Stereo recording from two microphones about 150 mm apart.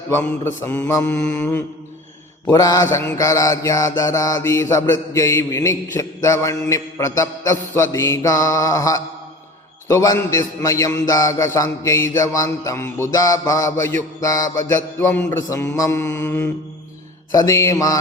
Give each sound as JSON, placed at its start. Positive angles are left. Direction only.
{"t": 0.1, "sound": "mantra", "side_deg": 15}